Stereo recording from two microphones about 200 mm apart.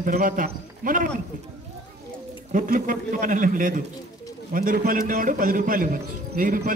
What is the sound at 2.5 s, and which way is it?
A woman's voice, 40° right (ahead or behind).